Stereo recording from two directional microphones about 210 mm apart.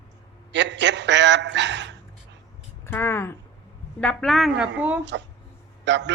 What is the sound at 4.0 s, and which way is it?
A woman's voice, 5° left (ahead or behind).